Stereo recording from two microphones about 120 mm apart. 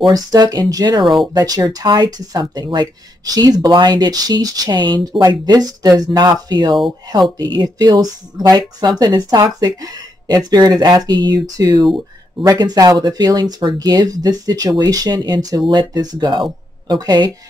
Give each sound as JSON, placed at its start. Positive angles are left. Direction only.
{"t": 0.0, "sound": "speech", "side_deg": -35}
{"t": 1.0, "sound": "speech", "side_deg": 0}
{"t": 1.3, "sound": "speech", "side_deg": -30}